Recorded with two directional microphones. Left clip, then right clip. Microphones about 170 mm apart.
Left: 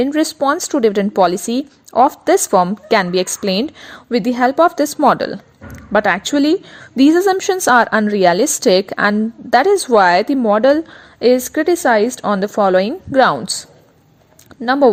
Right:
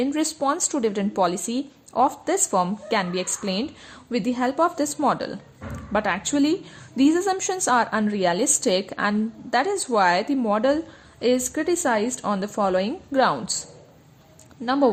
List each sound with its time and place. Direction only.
0.0 s a woman's voice: 40° left (ahead or behind)